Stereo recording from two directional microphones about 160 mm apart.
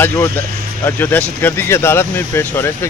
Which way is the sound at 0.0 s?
15° left (ahead or behind).